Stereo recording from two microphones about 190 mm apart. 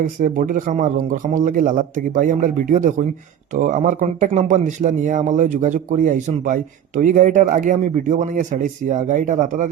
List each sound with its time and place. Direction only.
0.2 s a man's voice: 45° right (ahead or behind)